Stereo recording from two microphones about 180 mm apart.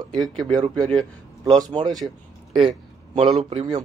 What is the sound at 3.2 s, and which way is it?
Speech, 35° right (ahead or behind).